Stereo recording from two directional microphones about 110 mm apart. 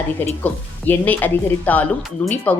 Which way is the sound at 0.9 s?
15° left (ahead or behind).